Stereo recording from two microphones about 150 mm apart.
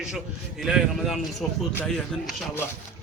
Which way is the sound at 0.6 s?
Centre (ahead or behind).